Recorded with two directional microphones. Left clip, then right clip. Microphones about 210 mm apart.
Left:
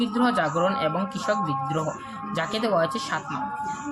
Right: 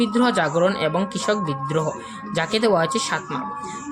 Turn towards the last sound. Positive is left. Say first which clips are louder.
# right 4 dB
turn(degrees=-35)  # may be behind; listen again after turning